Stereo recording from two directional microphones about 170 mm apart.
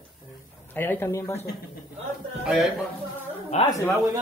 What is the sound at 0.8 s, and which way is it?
Speech, 10° left (ahead or behind).